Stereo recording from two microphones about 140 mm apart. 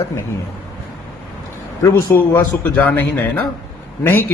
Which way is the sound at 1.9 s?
15° left (ahead or behind).